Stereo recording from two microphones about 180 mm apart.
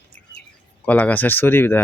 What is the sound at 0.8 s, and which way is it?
Speech, 10° left (ahead or behind).